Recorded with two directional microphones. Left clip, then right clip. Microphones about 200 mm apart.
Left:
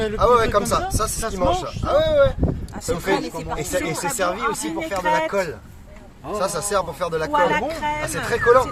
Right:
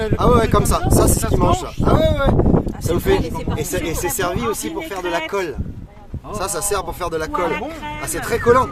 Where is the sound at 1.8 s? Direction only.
60° right (ahead or behind).